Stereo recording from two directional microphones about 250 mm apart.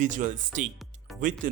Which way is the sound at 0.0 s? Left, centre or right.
Right.